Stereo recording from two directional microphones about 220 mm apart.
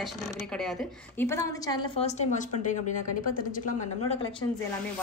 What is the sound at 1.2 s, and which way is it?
A woman's voice, 15° left (ahead or behind).